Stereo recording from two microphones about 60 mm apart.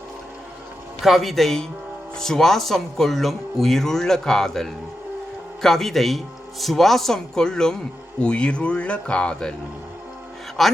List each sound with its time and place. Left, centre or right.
1.0 s a man's voice: centre
10.6 s a man's voice: centre